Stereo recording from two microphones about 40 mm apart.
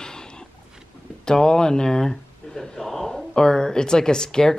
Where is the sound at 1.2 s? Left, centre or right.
Centre.